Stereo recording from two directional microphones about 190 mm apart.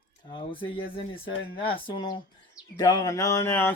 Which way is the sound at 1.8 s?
20° left (ahead or behind).